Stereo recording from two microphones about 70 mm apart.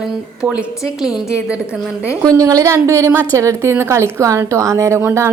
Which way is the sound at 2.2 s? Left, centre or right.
Right.